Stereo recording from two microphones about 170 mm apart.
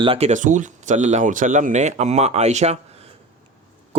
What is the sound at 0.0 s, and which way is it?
Speech, 35° right (ahead or behind).